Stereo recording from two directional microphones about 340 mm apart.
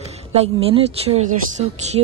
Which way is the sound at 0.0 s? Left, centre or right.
Centre.